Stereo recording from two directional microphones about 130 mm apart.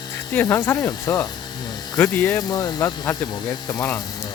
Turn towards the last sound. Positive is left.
turn(degrees=25)  # may be behind; listen again after turning